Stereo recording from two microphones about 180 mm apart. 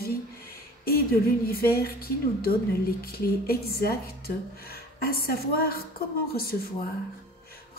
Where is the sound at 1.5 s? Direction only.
55° left (ahead or behind).